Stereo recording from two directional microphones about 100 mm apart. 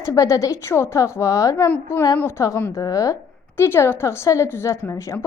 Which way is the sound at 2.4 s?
35° left (ahead or behind).